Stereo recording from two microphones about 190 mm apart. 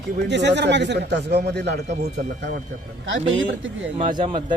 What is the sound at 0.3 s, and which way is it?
Speech, 65° right (ahead or behind).